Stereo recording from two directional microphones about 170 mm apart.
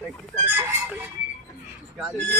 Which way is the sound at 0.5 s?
15° right (ahead or behind).